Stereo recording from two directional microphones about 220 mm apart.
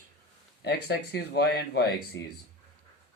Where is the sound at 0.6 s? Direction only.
50° left (ahead or behind).